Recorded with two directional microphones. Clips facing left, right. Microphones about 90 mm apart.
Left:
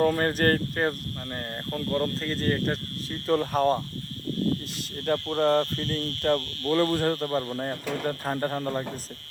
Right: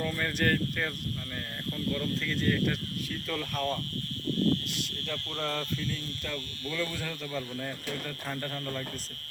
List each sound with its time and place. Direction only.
0.0 s speech: 50° left (ahead or behind)
5.0 s speech: 45° left (ahead or behind)
6.0 s speech: 55° left (ahead or behind)